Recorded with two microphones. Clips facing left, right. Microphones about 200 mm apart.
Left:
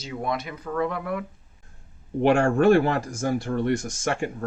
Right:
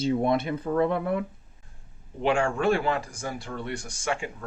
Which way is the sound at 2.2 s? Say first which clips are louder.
Left 6 dB; 45° left (ahead or behind).